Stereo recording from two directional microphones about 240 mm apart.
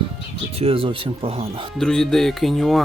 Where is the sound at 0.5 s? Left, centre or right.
Right.